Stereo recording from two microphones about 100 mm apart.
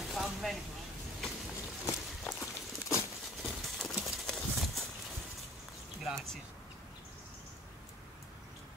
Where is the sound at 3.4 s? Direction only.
Centre (ahead or behind).